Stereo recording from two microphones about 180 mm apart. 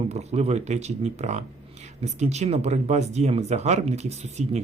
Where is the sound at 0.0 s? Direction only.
35° right (ahead or behind).